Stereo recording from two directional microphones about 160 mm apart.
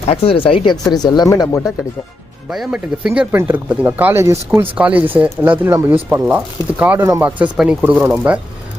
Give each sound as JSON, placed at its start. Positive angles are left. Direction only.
{"t": 0.1, "sound": "speech", "side_deg": 35}
{"t": 2.5, "sound": "speech", "side_deg": -5}